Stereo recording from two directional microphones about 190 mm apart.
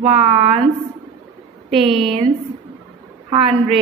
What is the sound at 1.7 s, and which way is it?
Speech, 30° right (ahead or behind).